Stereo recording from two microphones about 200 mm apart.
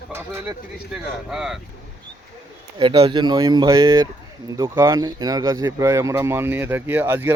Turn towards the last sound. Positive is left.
turn(degrees=-10)  # may be behind; listen again after turning